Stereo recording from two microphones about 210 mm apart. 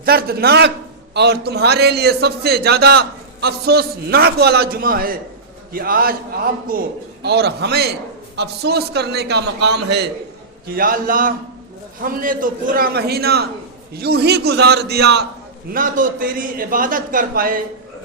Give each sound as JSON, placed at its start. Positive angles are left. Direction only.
{"t": 0.0, "sound": "a man's voice", "side_deg": -45}
{"t": 10.8, "sound": "a man's voice", "side_deg": -45}
{"t": 15.7, "sound": "a man's voice", "side_deg": -40}